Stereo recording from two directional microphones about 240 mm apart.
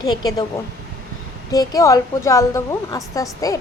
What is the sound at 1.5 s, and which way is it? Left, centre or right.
A woman's voice, centre.